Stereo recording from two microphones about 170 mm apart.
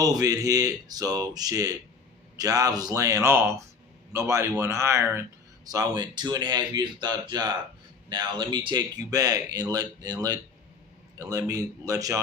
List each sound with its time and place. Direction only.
0.0 s speech: 20° right (ahead or behind)